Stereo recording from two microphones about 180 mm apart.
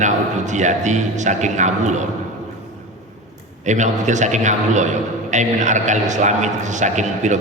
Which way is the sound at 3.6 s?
40° right (ahead or behind).